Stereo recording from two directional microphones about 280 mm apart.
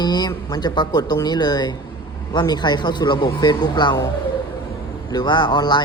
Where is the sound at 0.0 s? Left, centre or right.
Centre.